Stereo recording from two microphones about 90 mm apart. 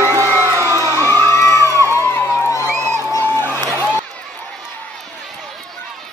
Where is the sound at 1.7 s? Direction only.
30° left (ahead or behind).